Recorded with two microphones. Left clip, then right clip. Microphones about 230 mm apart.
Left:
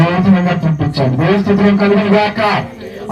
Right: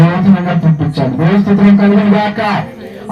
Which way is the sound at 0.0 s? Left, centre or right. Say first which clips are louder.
Even; left.